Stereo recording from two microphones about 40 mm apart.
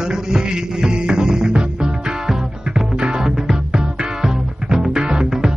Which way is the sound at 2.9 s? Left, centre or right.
Right.